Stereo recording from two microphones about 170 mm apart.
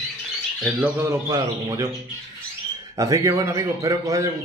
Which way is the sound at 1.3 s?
20° right (ahead or behind).